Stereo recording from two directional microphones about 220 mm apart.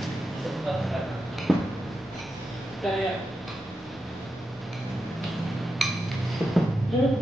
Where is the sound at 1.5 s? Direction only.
Centre (ahead or behind).